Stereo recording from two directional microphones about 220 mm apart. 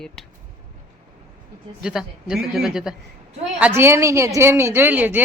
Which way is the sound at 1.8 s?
Centre (ahead or behind).